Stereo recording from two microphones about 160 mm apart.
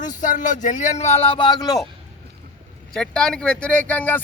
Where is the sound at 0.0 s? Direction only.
50° left (ahead or behind); by 1.8 s 25° left (ahead or behind).